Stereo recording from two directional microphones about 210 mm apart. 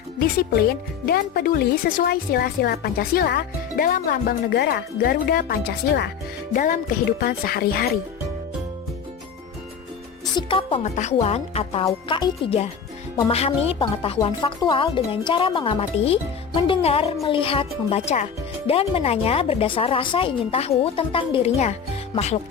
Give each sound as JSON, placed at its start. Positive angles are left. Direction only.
{"t": 0.2, "sound": "speech", "side_deg": 45}
{"t": 10.3, "sound": "speech", "side_deg": 25}